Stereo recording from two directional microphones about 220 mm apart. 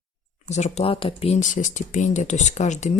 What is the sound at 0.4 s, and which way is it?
Speech, 30° left (ahead or behind).